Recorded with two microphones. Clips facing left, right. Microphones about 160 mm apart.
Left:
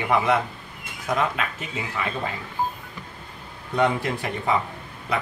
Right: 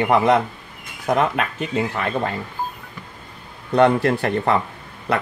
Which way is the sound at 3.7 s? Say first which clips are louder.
Right 7 dB; 65° right (ahead or behind).